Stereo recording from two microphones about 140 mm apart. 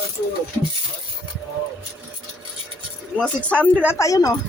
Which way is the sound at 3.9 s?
25° left (ahead or behind).